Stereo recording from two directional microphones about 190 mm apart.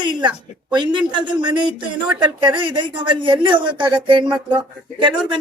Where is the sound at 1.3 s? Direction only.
25° right (ahead or behind).